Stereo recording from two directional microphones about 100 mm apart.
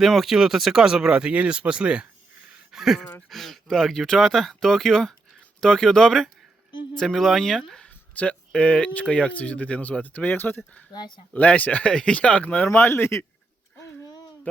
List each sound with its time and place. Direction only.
0.0 s speech: centre (ahead or behind)
3.0 s speech: 15° left (ahead or behind)
3.2 s speech: centre (ahead or behind); by 10.6 s 20° left (ahead or behind)
10.9 s speech: 45° left (ahead or behind)
11.3 s speech: 15° left (ahead or behind)
14.5 s speech: 15° left (ahead or behind)